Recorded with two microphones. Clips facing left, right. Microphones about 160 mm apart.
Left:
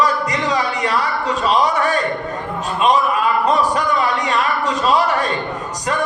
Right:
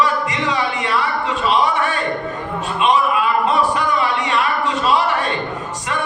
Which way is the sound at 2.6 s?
40° left (ahead or behind).